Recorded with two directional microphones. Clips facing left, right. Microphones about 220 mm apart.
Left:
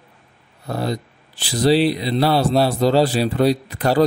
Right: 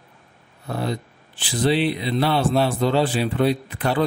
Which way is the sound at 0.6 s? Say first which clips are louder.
Left 2 dB; 40° left (ahead or behind).